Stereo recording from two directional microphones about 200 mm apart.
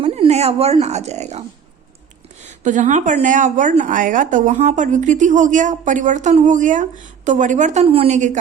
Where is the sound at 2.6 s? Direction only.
40° right (ahead or behind).